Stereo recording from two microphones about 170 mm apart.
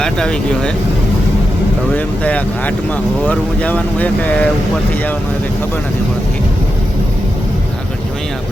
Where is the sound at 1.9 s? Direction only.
10° left (ahead or behind).